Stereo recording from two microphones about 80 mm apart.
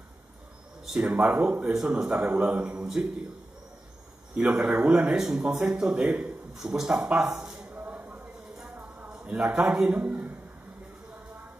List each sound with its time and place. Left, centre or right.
0.8 s speech: centre
2.1 s a man's voice: centre
4.4 s speech: centre
7.7 s chopping: centre
8.1 s a sound: centre
9.0 s a man's voice: centre